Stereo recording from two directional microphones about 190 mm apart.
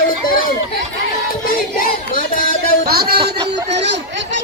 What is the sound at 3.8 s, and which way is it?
Speech, 65° right (ahead or behind).